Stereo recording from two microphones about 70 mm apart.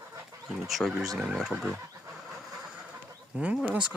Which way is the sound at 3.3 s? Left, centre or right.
Centre.